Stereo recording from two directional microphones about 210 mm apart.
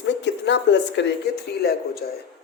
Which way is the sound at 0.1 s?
55° left (ahead or behind).